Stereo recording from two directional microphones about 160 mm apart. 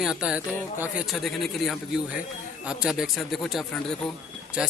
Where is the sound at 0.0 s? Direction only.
5° right (ahead or behind).